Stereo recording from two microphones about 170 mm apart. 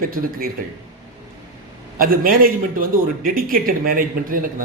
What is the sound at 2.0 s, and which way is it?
A man's voice, 55° right (ahead or behind).